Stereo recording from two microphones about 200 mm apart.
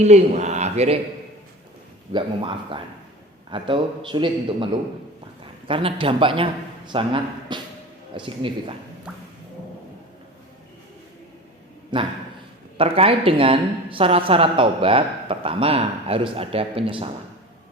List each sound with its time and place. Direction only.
0.0 s speech: 35° right (ahead or behind)
2.1 s a woman's voice: 25° right (ahead or behind)
11.9 s a woman's voice: 25° right (ahead or behind)